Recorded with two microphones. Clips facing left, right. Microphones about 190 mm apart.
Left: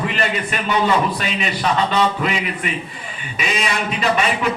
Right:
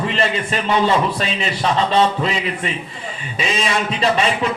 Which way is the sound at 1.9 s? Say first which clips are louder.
Right 2 dB; 30° right (ahead or behind).